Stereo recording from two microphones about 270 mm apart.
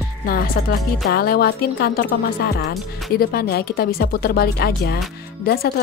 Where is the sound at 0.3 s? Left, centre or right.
Left.